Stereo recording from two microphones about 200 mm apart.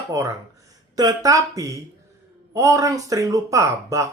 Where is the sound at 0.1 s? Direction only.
15° right (ahead or behind).